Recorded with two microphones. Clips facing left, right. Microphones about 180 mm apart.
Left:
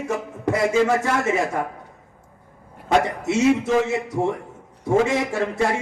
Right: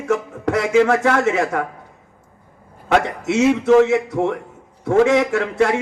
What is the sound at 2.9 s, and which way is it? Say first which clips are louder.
A man's voice: right 2 dB; 70° right (ahead or behind).